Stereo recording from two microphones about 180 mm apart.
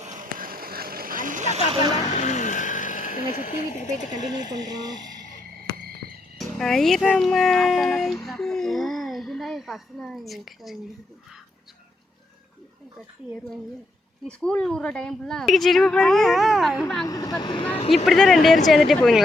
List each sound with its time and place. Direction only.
0.0 s vehicle: 45° right (ahead or behind)
2.0 s vehicle: 40° left (ahead or behind)
4.6 s speech: 20° right (ahead or behind)
4.9 s a sound: 45° left (ahead or behind)
6.4 s speech: centre (ahead or behind)
14.3 s a woman's voice: 5° left (ahead or behind)
17.1 s speech: 20° left (ahead or behind)
17.9 s a woman's voice: centre (ahead or behind)